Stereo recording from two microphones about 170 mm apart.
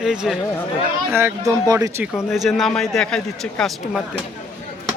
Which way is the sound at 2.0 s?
Centre (ahead or behind).